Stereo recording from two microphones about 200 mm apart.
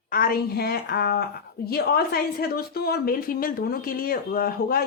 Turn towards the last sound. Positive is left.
turn(degrees=50)  # may be behind; listen again after turning